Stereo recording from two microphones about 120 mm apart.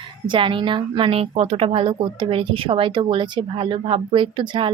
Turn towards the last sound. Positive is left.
turn(degrees=-40)  # may be behind; listen again after turning